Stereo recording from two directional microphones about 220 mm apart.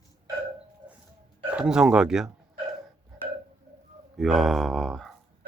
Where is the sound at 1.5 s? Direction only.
5° right (ahead or behind).